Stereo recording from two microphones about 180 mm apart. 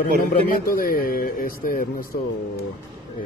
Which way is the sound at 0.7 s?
50° left (ahead or behind).